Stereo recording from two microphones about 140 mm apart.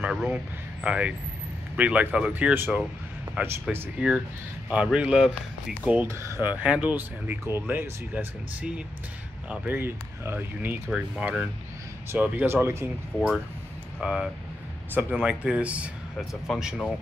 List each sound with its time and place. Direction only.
0.0 s speech: 5° right (ahead or behind)
5.9 s speech: 15° right (ahead or behind)
13.9 s speech: centre (ahead or behind)